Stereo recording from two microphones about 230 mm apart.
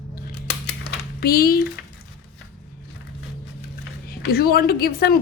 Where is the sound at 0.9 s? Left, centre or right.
Left.